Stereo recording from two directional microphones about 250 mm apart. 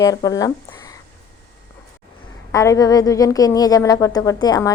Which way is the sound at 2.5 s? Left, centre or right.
Centre.